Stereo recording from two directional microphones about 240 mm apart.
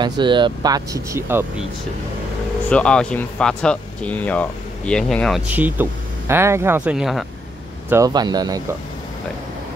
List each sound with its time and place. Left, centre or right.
0.0 s speech: centre
2.7 s speech: centre
7.9 s speech: centre